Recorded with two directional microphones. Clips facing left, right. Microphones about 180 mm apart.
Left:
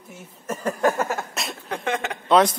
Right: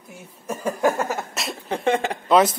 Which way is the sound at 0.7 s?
5° right (ahead or behind).